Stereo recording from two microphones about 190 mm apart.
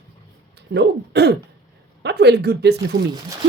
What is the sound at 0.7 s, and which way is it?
Speech, 55° right (ahead or behind).